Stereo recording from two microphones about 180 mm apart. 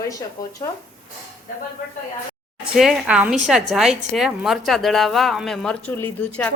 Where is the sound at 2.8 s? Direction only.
5° right (ahead or behind).